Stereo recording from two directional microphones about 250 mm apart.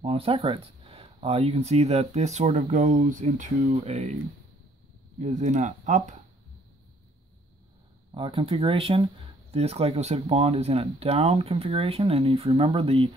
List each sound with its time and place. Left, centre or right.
0.0 s speech: right
5.2 s speech: right
8.1 s speech: centre